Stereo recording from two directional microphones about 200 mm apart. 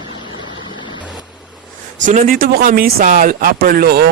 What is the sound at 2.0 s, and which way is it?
Speech, 40° right (ahead or behind).